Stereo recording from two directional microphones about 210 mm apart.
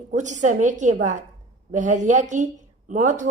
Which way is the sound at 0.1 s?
35° right (ahead or behind).